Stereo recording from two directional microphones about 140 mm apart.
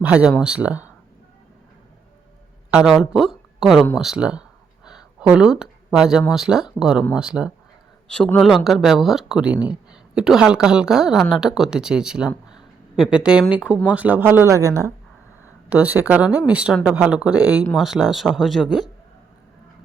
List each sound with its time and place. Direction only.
0.0 s speech: 10° right (ahead or behind)
2.6 s speech: 5° right (ahead or behind)
4.9 s a sound: 5° right (ahead or behind)
6.3 s speech: 5° right (ahead or behind)
8.0 s speech: 5° left (ahead or behind); by 14.7 s 20° right (ahead or behind)
15.7 s speech: 10° right (ahead or behind)